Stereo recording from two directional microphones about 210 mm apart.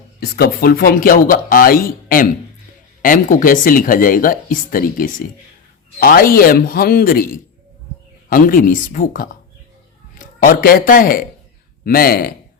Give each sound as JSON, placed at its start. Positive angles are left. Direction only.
{"t": 0.2, "sound": "speech", "side_deg": 45}
{"t": 8.3, "sound": "speech", "side_deg": 40}